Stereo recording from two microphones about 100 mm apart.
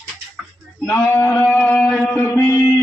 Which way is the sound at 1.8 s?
15° left (ahead or behind).